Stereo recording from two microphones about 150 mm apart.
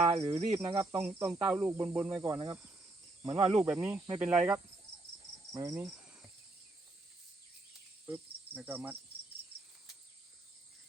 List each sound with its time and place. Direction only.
0.0 s speech: 45° right (ahead or behind)
0.6 s speech: 20° right (ahead or behind)
2.1 s insect: 25° right (ahead or behind)
3.2 s speech: 40° right (ahead or behind)
3.7 s speech: 10° right (ahead or behind)
5.5 s insect: 20° right (ahead or behind)
8.0 s insect: 10° right (ahead or behind)